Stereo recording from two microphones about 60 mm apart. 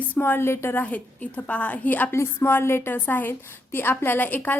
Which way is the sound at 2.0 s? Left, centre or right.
Left.